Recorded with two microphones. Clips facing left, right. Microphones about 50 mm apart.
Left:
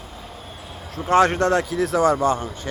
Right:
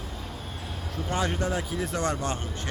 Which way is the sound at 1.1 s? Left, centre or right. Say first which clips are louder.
Left 12 dB; left.